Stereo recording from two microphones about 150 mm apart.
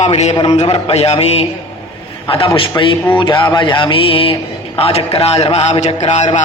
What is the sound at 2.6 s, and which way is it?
A man's voice, 35° left (ahead or behind).